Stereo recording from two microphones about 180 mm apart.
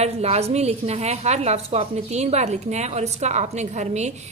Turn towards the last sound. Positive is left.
turn(degrees=-40)  # may be behind; listen again after turning